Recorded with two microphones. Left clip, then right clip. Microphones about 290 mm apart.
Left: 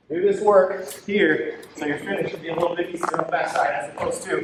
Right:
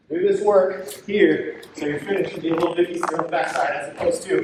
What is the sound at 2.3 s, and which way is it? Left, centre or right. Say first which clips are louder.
A man's voice: right 2 dB; left.